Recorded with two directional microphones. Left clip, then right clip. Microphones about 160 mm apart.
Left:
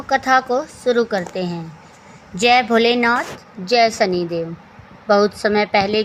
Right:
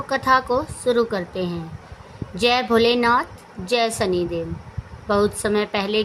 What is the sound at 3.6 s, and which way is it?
Speech, 5° left (ahead or behind).